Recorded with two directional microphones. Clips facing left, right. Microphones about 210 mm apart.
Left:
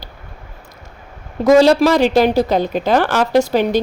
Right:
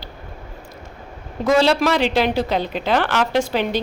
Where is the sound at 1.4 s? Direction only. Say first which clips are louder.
Left 6 dB; 40° left (ahead or behind).